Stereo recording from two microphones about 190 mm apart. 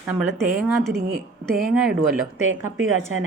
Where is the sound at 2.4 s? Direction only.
90° right.